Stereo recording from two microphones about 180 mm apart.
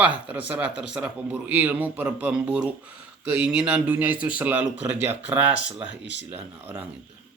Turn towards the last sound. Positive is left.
turn(degrees=75)  # may be behind; listen again after turning